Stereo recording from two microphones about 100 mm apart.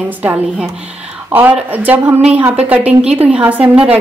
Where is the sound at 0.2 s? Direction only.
15° right (ahead or behind).